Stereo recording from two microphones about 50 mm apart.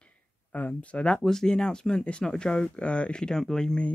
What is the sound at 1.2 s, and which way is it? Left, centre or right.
Speech, centre.